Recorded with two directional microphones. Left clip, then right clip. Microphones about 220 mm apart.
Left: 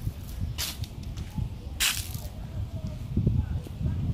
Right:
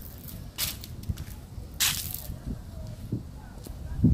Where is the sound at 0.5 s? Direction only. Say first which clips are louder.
Right 1 dB; 5° right (ahead or behind).